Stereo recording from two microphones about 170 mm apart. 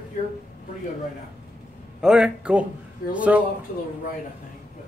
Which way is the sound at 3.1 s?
10° right (ahead or behind).